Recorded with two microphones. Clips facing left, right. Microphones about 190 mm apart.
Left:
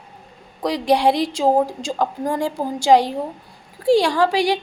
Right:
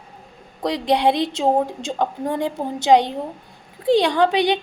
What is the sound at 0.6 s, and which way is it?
A woman's voice, 25° right (ahead or behind).